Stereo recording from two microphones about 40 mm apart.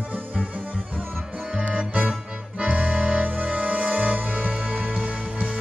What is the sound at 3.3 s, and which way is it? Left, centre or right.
Music, right.